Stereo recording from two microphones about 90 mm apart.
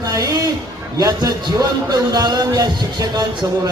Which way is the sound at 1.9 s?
50° right (ahead or behind).